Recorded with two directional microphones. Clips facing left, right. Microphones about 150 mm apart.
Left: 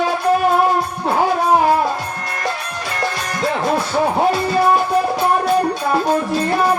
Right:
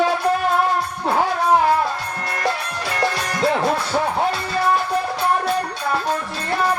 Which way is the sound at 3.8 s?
25° left (ahead or behind).